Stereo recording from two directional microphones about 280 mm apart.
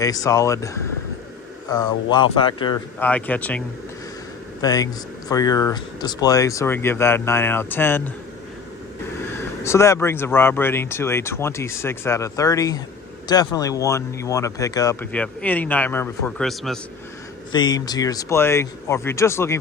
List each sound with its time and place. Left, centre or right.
0.0 s speech: centre
3.0 s speech: centre
4.6 s speech: centre
9.4 s speech: centre
17.5 s speech: centre